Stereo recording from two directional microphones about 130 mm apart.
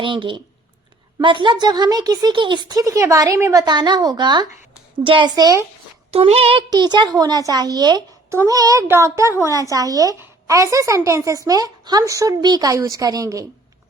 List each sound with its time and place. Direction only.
0.0 s a woman's voice: 40° right (ahead or behind)
6.1 s speech: 50° right (ahead or behind)
6.7 s a woman's voice: 35° right (ahead or behind)